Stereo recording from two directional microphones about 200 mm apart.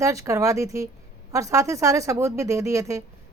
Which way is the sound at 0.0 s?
15° right (ahead or behind).